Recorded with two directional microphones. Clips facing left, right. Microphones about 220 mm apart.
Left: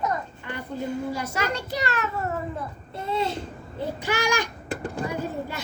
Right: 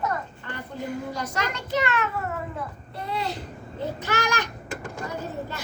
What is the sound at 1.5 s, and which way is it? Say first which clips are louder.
Speech: right 2 dB; 35° left (ahead or behind).